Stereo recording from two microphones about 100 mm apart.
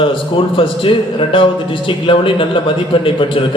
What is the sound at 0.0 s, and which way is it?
A man's voice, 60° left (ahead or behind).